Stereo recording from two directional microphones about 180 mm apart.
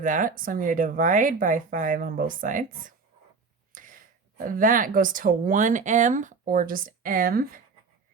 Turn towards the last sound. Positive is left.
turn(degrees=-50)  # may be behind; listen again after turning